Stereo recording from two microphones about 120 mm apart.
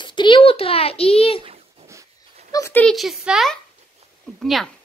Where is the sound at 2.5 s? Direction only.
30° left (ahead or behind).